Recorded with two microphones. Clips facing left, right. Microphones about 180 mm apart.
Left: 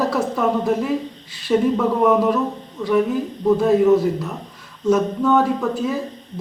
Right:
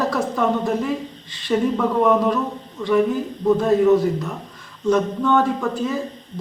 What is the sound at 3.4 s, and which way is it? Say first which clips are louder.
A man's voice: left 1 dB; 5° left (ahead or behind).